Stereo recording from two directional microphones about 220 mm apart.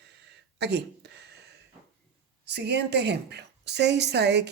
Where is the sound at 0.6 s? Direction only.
50° right (ahead or behind).